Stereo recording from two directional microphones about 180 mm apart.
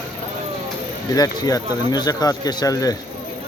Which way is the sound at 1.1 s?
20° left (ahead or behind).